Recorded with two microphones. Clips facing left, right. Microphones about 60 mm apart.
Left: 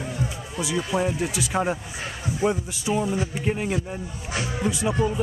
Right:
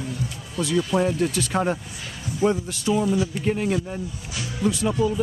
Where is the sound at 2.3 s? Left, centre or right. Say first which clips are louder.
Right 3 dB; centre.